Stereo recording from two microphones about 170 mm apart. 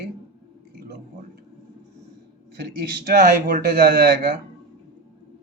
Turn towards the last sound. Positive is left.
turn(degrees=-60)  # may be behind; listen again after turning